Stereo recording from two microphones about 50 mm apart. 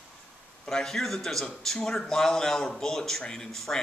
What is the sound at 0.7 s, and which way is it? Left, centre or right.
Speech, centre.